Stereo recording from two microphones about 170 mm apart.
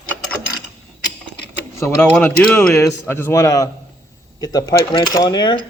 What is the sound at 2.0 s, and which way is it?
A man's voice, 5° left (ahead or behind).